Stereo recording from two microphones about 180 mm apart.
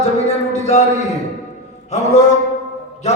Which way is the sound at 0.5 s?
40° left (ahead or behind).